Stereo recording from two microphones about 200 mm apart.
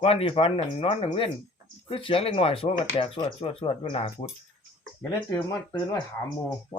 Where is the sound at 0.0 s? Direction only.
30° left (ahead or behind).